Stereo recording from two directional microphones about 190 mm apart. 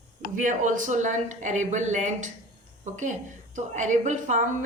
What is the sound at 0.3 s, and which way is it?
A woman's voice, 40° right (ahead or behind).